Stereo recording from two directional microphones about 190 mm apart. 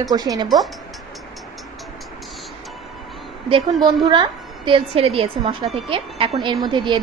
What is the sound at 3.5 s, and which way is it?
A woman's voice, 30° right (ahead or behind).